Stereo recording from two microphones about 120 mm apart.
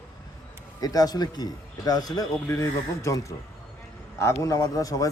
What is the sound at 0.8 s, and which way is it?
A man's voice, 30° left (ahead or behind).